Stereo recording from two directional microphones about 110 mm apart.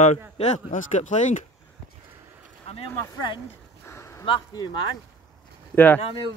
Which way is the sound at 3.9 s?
25° left (ahead or behind).